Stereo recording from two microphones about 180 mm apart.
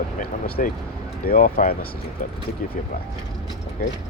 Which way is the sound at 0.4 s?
60° left (ahead or behind).